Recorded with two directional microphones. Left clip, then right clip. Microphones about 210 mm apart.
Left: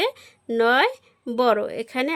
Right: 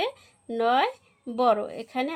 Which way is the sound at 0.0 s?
40° left (ahead or behind).